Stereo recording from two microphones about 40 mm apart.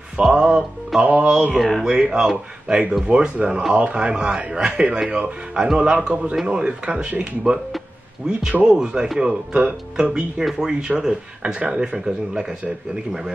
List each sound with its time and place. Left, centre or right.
0.2 s speech: centre
1.0 s music: right
1.3 s speech: centre
1.6 s speech: centre
1.9 s speech: centre